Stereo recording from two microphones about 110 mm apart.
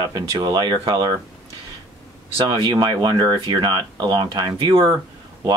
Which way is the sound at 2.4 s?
40° right (ahead or behind).